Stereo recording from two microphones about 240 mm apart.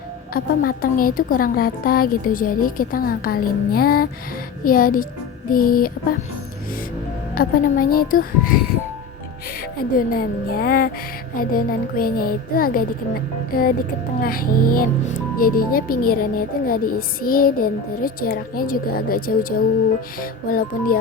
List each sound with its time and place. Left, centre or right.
0.3 s speech: left
7.3 s speech: left
9.7 s speech: left
14.2 s speech: left